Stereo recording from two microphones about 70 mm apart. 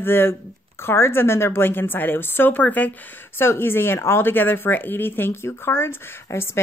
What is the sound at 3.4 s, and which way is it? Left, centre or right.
Speech, left.